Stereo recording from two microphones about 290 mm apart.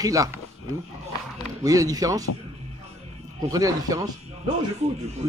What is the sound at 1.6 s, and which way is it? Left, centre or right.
Speech, centre.